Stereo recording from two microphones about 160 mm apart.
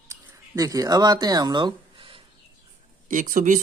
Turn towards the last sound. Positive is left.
turn(degrees=-55)  # may be behind; listen again after turning